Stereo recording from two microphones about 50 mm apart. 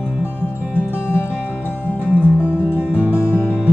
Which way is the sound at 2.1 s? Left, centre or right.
Right.